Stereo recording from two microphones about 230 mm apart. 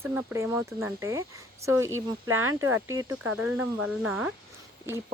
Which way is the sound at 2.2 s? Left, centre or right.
Right.